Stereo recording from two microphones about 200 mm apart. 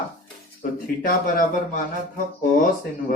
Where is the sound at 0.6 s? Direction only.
45° left (ahead or behind).